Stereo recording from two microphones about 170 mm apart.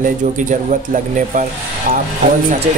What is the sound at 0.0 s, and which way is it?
Speech, 50° right (ahead or behind).